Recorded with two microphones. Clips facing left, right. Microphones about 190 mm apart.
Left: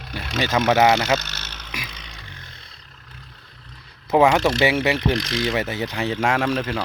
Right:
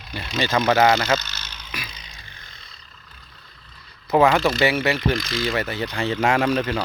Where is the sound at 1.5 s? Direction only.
70° left (ahead or behind).